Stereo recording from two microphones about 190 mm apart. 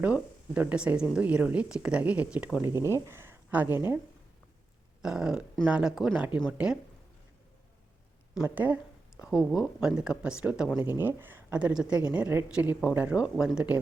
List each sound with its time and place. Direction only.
0.0 s a woman's voice: 5° right (ahead or behind)
2.7 s speech: 15° left (ahead or behind)
3.1 s speech: 10° right (ahead or behind)
5.0 s speech: 5° right (ahead or behind)
8.4 s a woman's voice: 10° right (ahead or behind)